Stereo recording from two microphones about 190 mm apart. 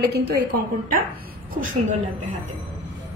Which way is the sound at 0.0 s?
60° right (ahead or behind).